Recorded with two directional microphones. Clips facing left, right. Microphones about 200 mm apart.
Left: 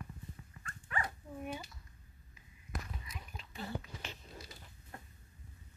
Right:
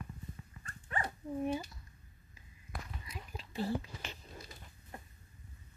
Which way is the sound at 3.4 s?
35° right (ahead or behind).